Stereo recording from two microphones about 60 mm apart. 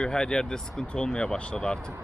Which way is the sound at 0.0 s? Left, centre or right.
Centre.